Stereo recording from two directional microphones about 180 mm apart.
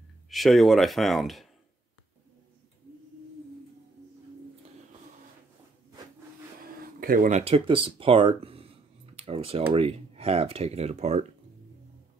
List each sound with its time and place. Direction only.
0.3 s speech: centre (ahead or behind)
6.6 s speech: 55° right (ahead or behind); by 11.2 s 35° right (ahead or behind)